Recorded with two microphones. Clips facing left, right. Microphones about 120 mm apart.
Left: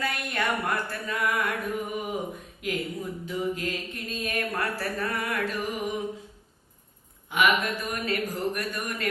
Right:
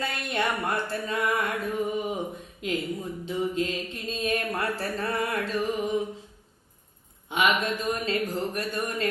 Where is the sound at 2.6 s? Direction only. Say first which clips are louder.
Right 1 dB; 25° right (ahead or behind).